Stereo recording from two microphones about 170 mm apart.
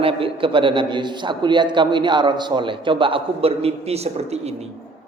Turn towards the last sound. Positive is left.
turn(degrees=-40)  # may be behind; listen again after turning